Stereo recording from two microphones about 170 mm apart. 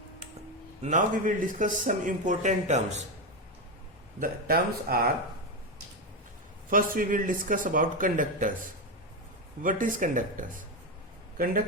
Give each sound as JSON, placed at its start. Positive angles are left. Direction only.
{"t": 0.8, "sound": "speech", "side_deg": -45}
{"t": 4.2, "sound": "speech", "side_deg": -60}
{"t": 6.7, "sound": "speech", "side_deg": -55}
{"t": 9.6, "sound": "speech", "side_deg": -50}